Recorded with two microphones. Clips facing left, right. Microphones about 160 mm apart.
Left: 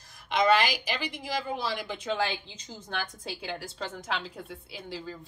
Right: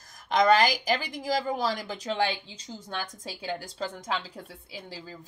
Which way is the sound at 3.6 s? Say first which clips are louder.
Right 2 dB; 35° right (ahead or behind).